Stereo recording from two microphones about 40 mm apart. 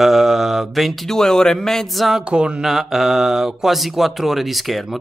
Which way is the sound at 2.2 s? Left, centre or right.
Right.